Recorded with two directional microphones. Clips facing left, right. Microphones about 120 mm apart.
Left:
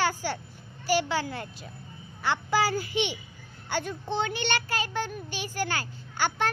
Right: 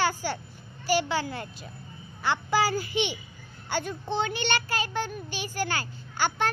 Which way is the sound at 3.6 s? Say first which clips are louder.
Even; 25° right (ahead or behind).